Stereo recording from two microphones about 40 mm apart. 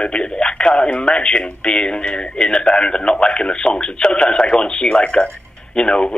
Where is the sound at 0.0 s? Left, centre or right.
Left.